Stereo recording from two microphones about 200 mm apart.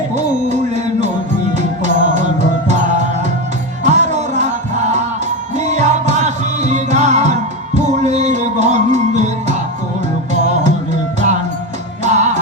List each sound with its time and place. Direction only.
0.2 s music: 35° right (ahead or behind)
12.0 s music: 35° right (ahead or behind)